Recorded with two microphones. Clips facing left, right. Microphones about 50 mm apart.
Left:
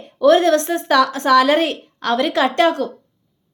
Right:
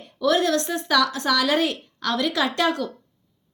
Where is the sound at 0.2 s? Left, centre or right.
Left.